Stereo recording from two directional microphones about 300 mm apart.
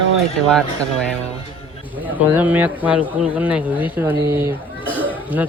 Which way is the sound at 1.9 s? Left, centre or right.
Centre.